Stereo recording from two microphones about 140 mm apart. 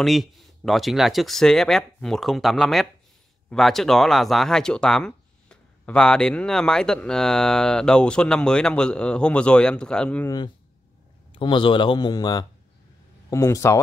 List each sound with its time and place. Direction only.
0.0 s speech: centre (ahead or behind)
10.2 s speech: 30° left (ahead or behind)